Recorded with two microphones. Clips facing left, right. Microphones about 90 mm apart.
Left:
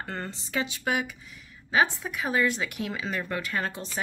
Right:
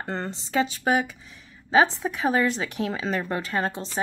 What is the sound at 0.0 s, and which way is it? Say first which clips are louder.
Speech: right 4 dB; 30° right (ahead or behind).